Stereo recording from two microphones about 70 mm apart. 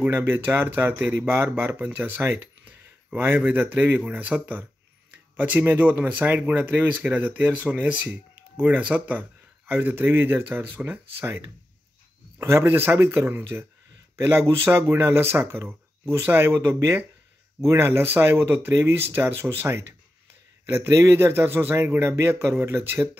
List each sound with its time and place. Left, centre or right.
0.1 s a man's voice: right
2.2 s a sound: right
3.2 s a man's voice: right
15.4 s a man's voice: right